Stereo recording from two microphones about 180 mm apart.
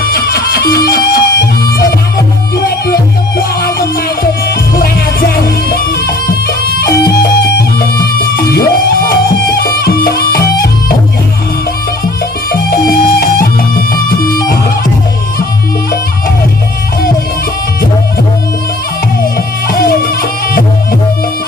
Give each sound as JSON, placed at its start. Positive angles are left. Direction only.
{"t": 0.0, "sound": "music", "side_deg": 55}
{"t": 4.7, "sound": "music", "side_deg": 55}
{"t": 8.0, "sound": "music", "side_deg": 55}
{"t": 12.5, "sound": "music", "side_deg": 55}
{"t": 19.7, "sound": "music", "side_deg": 55}